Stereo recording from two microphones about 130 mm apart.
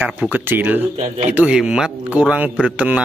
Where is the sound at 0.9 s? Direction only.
65° right (ahead or behind).